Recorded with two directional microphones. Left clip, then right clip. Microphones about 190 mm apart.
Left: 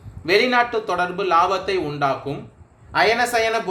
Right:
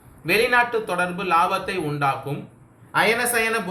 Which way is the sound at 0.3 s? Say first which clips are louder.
Left 1 dB; 45° left (ahead or behind).